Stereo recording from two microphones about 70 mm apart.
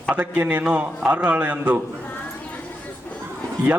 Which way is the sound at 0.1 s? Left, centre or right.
Right.